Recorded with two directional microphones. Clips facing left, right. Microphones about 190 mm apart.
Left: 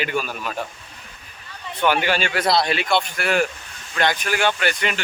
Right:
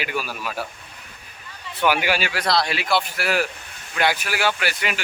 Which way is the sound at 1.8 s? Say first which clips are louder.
Left 1 dB; 10° right (ahead or behind).